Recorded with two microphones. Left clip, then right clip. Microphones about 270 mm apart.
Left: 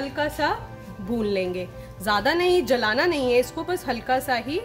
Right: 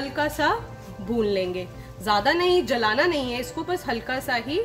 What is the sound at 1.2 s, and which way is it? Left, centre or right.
A woman's voice, centre.